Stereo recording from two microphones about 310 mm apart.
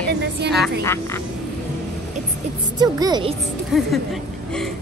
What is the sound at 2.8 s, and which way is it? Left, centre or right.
Speech, centre.